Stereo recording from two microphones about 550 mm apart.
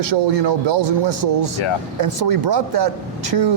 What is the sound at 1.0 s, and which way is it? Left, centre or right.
A man's voice, right.